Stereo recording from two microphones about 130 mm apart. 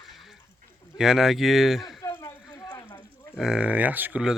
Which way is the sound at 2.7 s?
35° left (ahead or behind).